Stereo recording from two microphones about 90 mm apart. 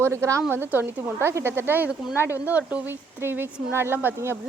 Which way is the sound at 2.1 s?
30° left (ahead or behind).